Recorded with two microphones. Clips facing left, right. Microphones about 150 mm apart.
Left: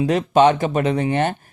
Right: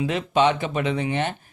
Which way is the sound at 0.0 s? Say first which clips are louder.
Left 6 dB; 40° left (ahead or behind).